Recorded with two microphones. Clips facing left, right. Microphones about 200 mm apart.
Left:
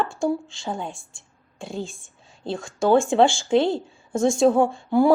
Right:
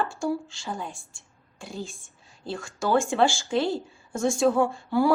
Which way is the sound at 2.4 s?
25° left (ahead or behind).